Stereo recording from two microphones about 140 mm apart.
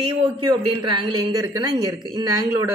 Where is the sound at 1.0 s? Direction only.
25° right (ahead or behind).